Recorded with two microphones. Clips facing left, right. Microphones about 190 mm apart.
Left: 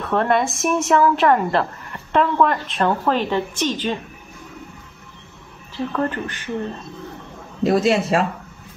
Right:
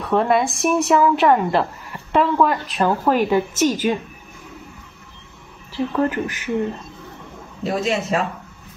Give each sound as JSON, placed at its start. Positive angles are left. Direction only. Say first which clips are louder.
{"t": 0.0, "sound": "a woman's voice", "louder": "right 1 dB", "side_deg": 0}
{"t": 5.9, "sound": "speech", "louder": "right 3 dB", "side_deg": -10}
{"t": 7.6, "sound": "speech", "louder": "left 5 dB", "side_deg": 35}